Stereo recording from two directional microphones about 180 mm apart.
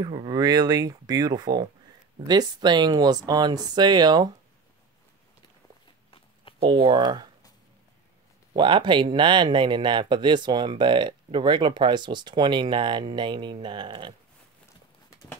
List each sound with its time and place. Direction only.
0.0 s speech: 25° right (ahead or behind)
6.7 s speech: 25° right (ahead or behind)
8.5 s speech: 25° right (ahead or behind)